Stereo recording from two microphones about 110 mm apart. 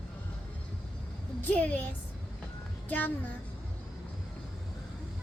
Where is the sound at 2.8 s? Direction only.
15° left (ahead or behind).